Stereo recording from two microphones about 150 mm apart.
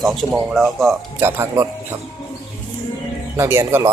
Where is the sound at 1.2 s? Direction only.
15° right (ahead or behind).